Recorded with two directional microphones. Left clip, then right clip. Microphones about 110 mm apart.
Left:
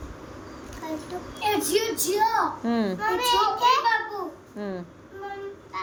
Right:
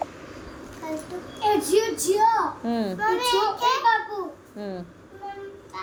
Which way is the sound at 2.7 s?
5° left (ahead or behind).